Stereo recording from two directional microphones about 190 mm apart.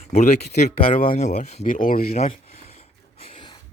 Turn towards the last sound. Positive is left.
turn(degrees=30)  # may be behind; listen again after turning